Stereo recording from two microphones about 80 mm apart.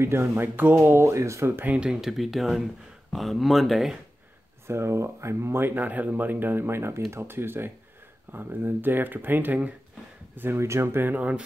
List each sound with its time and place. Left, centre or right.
0.0 s speech: right
1.7 s speech: centre
4.6 s speech: right; by 11.4 s centre